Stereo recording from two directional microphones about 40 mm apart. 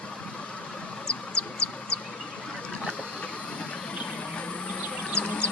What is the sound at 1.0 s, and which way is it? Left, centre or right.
Bird, left.